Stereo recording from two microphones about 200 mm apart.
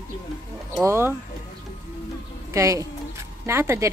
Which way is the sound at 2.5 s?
15° right (ahead or behind).